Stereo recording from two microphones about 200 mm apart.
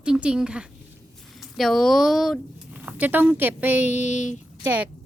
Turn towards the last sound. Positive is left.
turn(degrees=-5)  # may be behind; listen again after turning